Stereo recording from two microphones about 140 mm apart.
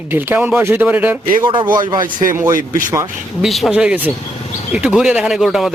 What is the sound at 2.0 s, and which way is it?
Speech, 75° right (ahead or behind).